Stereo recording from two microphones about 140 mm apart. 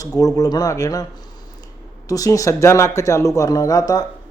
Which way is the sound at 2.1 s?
25° left (ahead or behind).